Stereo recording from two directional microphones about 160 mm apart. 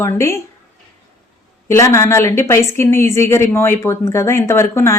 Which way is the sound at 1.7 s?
15° left (ahead or behind).